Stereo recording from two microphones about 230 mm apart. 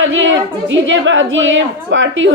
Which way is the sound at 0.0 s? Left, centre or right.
Right.